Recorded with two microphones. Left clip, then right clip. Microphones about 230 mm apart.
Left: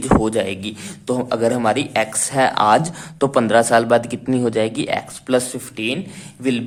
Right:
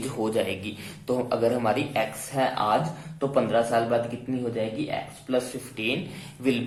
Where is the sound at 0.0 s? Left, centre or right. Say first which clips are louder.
Left 9 dB; left.